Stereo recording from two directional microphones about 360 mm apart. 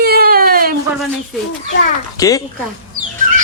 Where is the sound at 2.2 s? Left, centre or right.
Centre.